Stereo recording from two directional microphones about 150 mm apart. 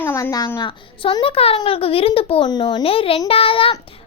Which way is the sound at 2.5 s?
30° left (ahead or behind).